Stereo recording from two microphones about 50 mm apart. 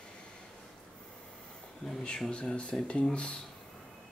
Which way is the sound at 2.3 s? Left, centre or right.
Left.